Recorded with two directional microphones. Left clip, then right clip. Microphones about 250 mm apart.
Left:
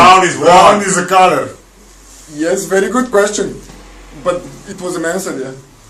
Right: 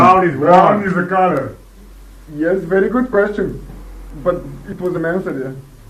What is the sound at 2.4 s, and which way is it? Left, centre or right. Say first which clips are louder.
Speech: left 2 dB; centre.